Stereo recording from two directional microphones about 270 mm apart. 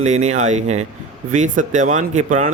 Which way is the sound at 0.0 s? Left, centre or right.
Right.